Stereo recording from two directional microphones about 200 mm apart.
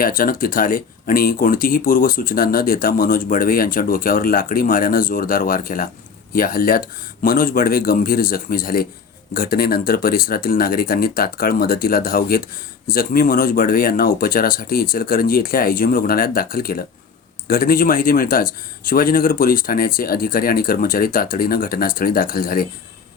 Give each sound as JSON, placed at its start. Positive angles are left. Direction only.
{"t": 0.0, "sound": "speech", "side_deg": 45}